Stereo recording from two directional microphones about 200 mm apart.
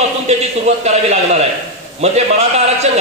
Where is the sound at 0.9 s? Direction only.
35° right (ahead or behind).